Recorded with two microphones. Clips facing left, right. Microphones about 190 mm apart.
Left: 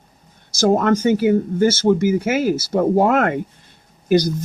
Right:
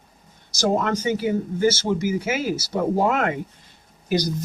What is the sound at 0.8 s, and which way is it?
Speech, 55° left (ahead or behind).